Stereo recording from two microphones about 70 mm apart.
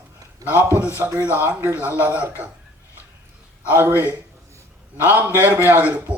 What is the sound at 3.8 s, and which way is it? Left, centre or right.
A man's voice, right.